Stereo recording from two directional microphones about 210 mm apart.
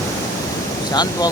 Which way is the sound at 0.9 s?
20° left (ahead or behind).